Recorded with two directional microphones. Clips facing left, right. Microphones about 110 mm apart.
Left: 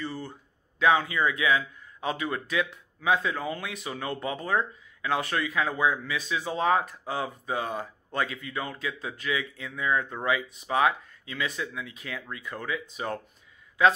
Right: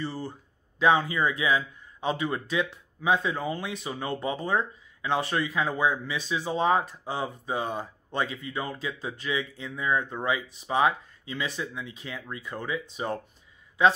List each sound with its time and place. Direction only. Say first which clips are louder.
0.0 s speech: right 2 dB; 30° right (ahead or behind)